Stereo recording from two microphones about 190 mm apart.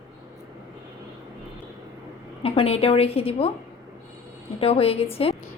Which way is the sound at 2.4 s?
30° left (ahead or behind).